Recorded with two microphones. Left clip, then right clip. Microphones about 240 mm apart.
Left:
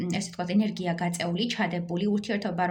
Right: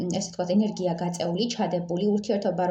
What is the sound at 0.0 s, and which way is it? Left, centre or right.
Speech, left.